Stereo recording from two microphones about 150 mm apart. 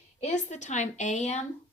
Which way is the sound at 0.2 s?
50° left (ahead or behind).